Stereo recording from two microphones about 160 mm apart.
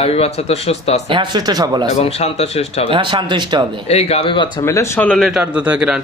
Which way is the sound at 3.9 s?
40° left (ahead or behind).